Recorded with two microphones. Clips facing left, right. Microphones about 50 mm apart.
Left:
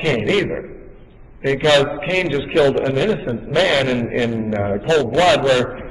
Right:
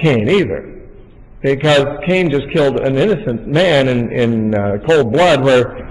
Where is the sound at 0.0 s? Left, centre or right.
Centre.